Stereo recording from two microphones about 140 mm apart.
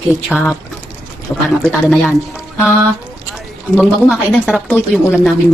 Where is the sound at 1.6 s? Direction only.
5° left (ahead or behind).